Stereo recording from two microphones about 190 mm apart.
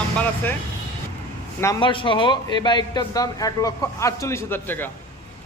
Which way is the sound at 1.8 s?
25° left (ahead or behind).